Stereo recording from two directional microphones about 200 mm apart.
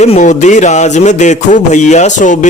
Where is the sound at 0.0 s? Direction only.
35° left (ahead or behind).